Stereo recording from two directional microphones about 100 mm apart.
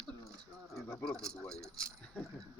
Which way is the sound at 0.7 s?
5° left (ahead or behind).